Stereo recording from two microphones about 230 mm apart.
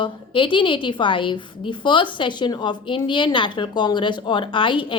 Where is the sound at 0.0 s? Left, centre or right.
Left.